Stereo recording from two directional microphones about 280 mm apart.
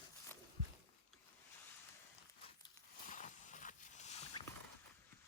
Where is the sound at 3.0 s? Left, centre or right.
Left.